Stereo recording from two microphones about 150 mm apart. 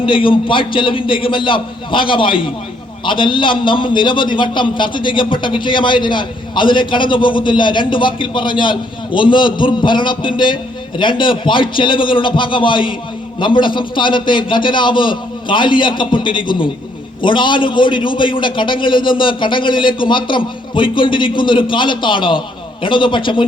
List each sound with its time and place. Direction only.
0.0 s a man's voice: 35° left (ahead or behind)